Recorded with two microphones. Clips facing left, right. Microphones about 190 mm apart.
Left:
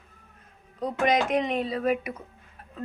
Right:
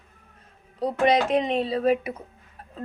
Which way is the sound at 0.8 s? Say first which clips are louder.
Right 3 dB; 30° right (ahead or behind).